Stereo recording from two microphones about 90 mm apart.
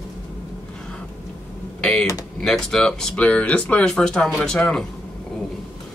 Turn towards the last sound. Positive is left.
turn(degrees=5)  # may be behind; listen again after turning